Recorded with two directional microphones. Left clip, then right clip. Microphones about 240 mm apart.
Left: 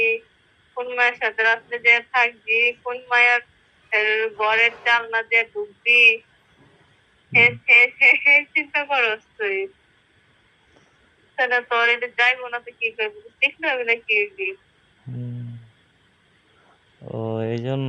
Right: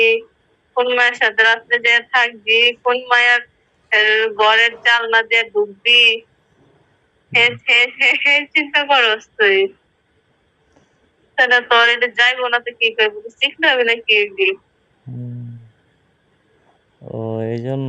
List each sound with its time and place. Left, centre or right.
0.7 s a woman's voice: right
7.3 s a woman's voice: right
11.3 s a woman's voice: right
17.1 s speech: centre